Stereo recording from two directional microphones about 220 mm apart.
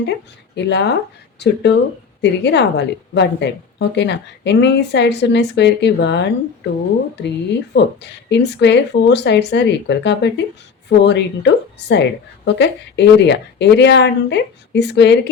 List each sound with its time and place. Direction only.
0.0 s a woman's voice: 50° left (ahead or behind)